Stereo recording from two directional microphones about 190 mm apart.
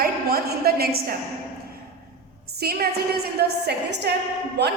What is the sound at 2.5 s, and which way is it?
A woman's voice, 55° right (ahead or behind).